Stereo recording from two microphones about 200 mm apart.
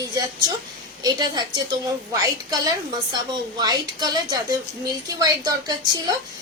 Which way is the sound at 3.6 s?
20° right (ahead or behind).